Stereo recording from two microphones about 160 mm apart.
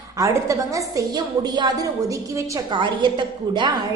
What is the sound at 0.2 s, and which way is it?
A woman's voice, 20° right (ahead or behind).